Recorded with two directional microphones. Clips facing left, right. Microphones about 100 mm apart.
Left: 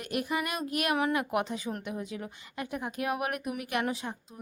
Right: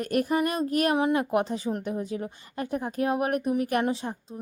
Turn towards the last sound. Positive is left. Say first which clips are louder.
# right 5 dB
turn(degrees=-30)  # may be behind; listen again after turning